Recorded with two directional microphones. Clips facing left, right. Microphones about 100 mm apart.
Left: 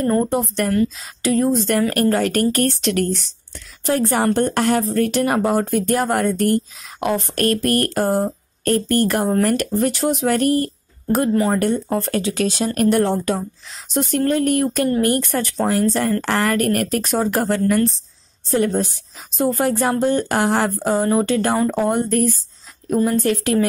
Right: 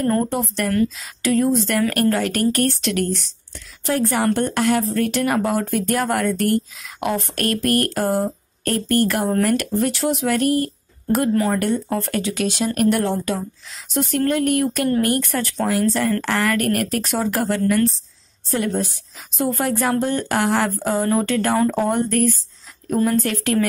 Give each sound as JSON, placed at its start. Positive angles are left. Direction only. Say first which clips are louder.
{"t": 0.1, "sound": "a woman's voice", "louder": "left 2 dB", "side_deg": 20}
{"t": 19.3, "sound": "speech", "louder": "left 3 dB", "side_deg": 25}